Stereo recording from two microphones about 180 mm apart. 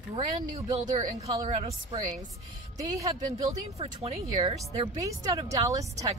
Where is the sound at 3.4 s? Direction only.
35° right (ahead or behind); by 6.1 s 20° right (ahead or behind).